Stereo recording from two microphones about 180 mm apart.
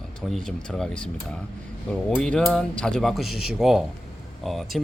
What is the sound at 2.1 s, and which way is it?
Speech, 5° left (ahead or behind).